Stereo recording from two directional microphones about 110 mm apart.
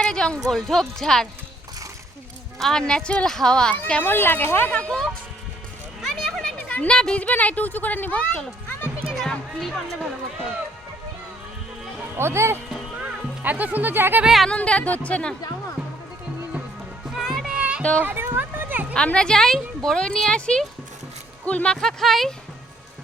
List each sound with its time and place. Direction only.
0.0 s speech: 5° left (ahead or behind)
2.6 s speech: 5° left (ahead or behind)
9.1 s music: 5° left (ahead or behind)
12.1 s speech: 25° right (ahead or behind)
14.3 s speech: centre (ahead or behind)
14.5 s speech: 10° left (ahead or behind)
17.2 s music: 5° right (ahead or behind)
18.0 s a sound: 20° right (ahead or behind)
18.9 s speech: 10° left (ahead or behind)